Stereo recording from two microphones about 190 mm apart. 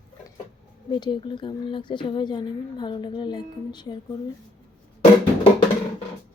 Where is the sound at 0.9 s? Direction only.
25° left (ahead or behind).